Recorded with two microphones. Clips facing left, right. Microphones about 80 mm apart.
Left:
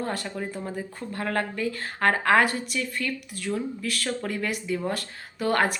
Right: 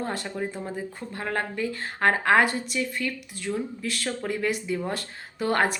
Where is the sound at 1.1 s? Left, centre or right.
Centre.